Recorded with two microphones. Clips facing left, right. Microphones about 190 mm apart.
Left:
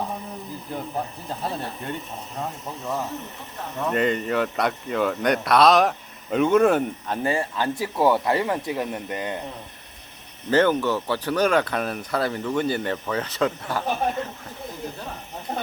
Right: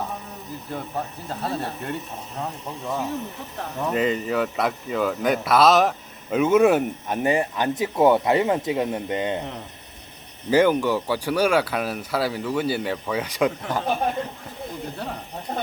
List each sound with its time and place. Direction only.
1.3 s speech: centre (ahead or behind); by 9.4 s 20° right (ahead or behind)
10.5 s speech: 10° right (ahead or behind)